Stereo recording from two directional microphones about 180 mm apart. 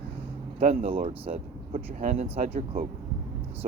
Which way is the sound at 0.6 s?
45° right (ahead or behind).